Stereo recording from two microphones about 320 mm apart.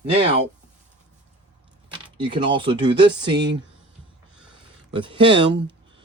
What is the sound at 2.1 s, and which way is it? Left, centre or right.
Speech, centre.